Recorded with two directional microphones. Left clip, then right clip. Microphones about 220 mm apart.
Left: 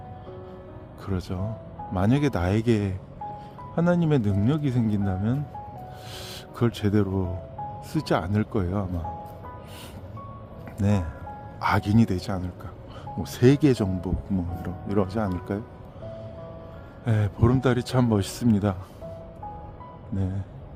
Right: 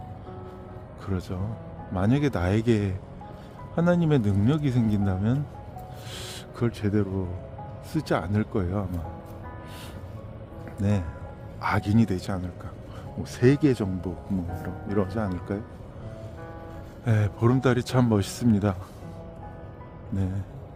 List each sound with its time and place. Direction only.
1.0 s speech: 10° left (ahead or behind)
6.1 s a sound: 5° left (ahead or behind)
6.7 s speech: 20° left (ahead or behind)
10.8 s speech: 15° left (ahead or behind)
17.1 s speech: 5° left (ahead or behind)
20.1 s speech: 5° left (ahead or behind)